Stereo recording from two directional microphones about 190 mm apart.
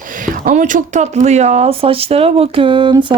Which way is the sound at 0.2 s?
45° right (ahead or behind).